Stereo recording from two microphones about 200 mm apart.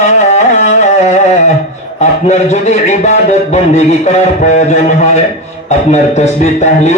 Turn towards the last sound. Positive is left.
turn(degrees=35)  # may be behind; listen again after turning